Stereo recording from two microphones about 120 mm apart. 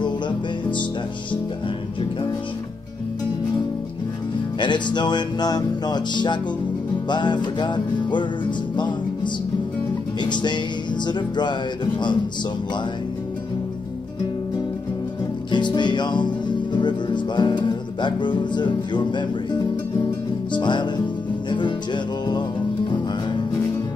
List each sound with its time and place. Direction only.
4.6 s music: 40° left (ahead or behind)
15.5 s music: 40° left (ahead or behind)